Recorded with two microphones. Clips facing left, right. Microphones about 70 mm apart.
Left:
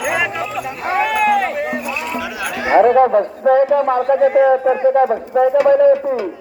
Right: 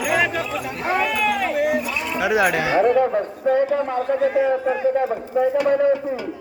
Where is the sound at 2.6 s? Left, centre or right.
Left.